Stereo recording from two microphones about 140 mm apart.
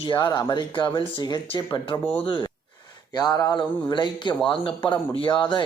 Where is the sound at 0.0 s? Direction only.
30° left (ahead or behind).